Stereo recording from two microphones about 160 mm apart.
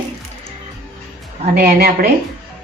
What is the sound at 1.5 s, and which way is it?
Speech, 65° right (ahead or behind).